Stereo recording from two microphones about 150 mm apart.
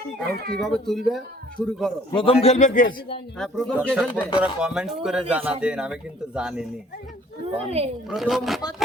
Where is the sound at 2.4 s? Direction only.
50° left (ahead or behind); by 3.2 s 70° left (ahead or behind).